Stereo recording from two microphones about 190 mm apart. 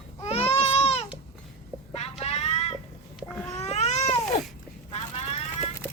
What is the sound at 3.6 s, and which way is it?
Babbling, 35° left (ahead or behind).